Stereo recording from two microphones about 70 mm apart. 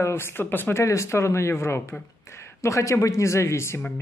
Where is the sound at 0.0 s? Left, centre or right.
Left.